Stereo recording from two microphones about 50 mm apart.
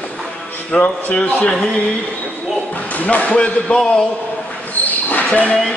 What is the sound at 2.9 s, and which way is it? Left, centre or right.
Speech, left.